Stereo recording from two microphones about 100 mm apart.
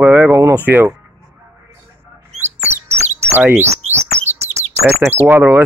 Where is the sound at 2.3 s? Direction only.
90° right.